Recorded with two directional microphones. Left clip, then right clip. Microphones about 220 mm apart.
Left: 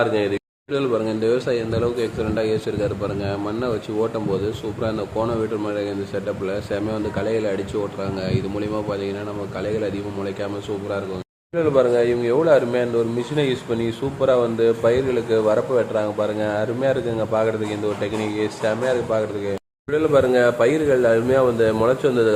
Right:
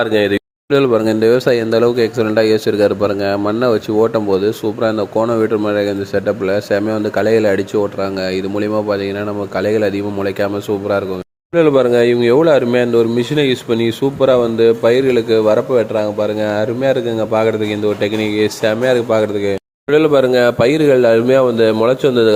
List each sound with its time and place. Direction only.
0.0 s speech: 30° right (ahead or behind)